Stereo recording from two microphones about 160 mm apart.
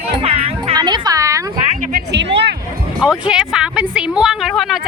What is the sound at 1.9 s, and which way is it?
Music, 90° right.